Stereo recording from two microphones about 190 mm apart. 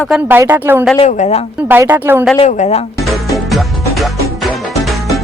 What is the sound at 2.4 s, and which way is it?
Speech, 35° left (ahead or behind).